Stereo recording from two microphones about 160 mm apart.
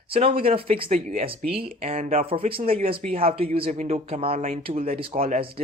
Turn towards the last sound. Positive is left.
turn(degrees=-35)  # may be behind; listen again after turning